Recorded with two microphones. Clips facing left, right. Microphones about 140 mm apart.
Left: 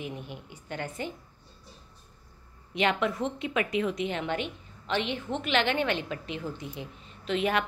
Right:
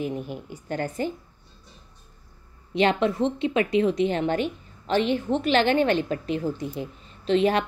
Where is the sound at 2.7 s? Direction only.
30° right (ahead or behind).